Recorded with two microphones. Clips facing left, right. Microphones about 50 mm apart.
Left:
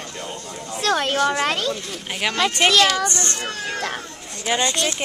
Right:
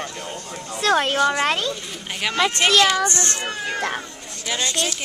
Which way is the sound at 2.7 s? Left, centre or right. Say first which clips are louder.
Right 2 dB; centre.